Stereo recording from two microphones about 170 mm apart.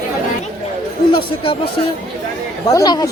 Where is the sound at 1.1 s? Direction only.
30° left (ahead or behind).